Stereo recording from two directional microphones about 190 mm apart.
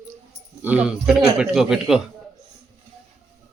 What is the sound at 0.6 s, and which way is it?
Speech, 5° right (ahead or behind).